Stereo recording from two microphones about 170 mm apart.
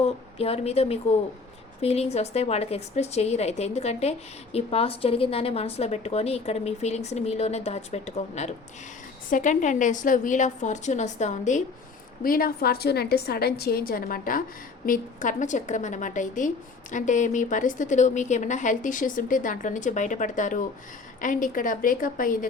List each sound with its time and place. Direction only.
0.0 s a woman's voice: 35° left (ahead or behind)
12.2 s a woman's voice: 60° left (ahead or behind)